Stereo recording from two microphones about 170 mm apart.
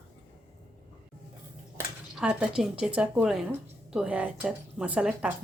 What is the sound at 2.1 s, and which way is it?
Speech, 5° right (ahead or behind).